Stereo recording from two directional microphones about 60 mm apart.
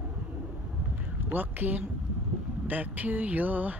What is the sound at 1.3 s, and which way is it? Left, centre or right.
Speech, right.